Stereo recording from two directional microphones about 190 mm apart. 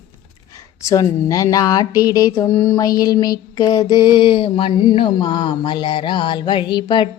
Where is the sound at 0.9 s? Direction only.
20° left (ahead or behind).